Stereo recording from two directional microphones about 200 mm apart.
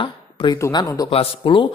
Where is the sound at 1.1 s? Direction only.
25° left (ahead or behind).